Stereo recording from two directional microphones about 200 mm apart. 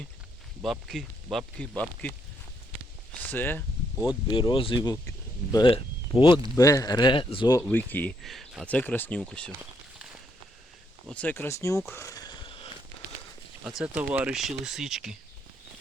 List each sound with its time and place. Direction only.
0.6 s speech: centre (ahead or behind)
3.2 s speech: 10° left (ahead or behind)
4.3 s speech: 25° left (ahead or behind); by 9.5 s 5° left (ahead or behind)
11.1 s speech: 5° left (ahead or behind)
11.9 s a sound: 15° left (ahead or behind)
13.7 s speech: 5° right (ahead or behind)